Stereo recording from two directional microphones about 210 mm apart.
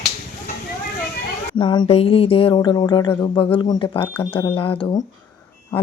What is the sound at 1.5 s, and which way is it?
Speech, 25° left (ahead or behind).